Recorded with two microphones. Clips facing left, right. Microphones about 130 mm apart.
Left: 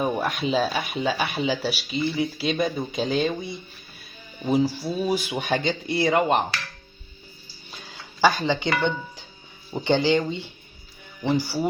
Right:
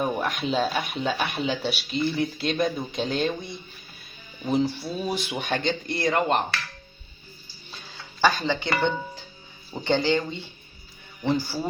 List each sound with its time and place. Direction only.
0.0 s speech: centre (ahead or behind)
8.2 s speech: 15° left (ahead or behind)
9.8 s speech: 15° left (ahead or behind)